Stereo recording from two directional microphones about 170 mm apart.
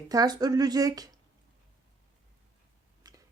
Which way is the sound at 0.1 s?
20° right (ahead or behind).